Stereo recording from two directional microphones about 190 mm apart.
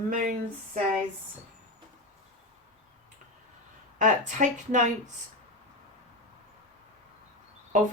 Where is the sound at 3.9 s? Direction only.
40° right (ahead or behind).